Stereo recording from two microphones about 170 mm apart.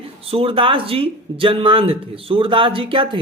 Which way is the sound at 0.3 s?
35° right (ahead or behind).